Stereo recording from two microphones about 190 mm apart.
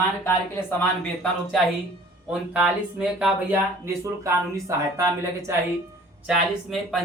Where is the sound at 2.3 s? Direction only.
5° right (ahead or behind).